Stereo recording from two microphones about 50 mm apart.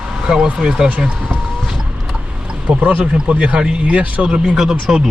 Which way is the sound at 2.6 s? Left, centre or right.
Right.